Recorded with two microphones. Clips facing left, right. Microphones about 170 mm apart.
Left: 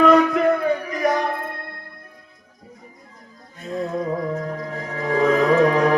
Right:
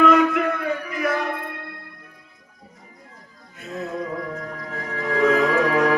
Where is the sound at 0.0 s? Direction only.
35° left (ahead or behind).